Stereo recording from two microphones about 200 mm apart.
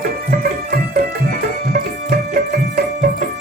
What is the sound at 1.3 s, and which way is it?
Music, 50° right (ahead or behind).